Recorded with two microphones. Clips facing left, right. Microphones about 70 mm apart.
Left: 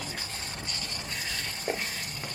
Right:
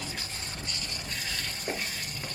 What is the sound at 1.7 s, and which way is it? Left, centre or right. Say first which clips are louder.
Stir: left 3 dB; centre.